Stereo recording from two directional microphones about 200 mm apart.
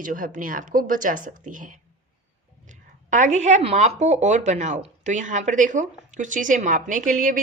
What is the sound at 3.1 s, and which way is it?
Speech, 35° right (ahead or behind).